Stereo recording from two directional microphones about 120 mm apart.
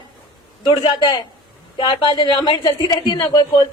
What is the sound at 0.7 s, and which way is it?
A woman's voice, 35° left (ahead or behind).